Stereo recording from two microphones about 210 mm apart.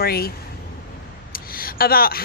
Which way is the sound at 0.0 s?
45° left (ahead or behind).